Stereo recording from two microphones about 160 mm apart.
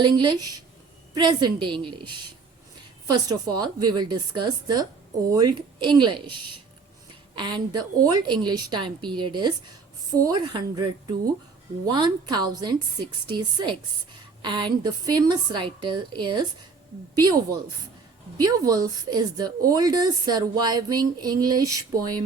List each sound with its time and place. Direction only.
0.0 s speech: 30° right (ahead or behind)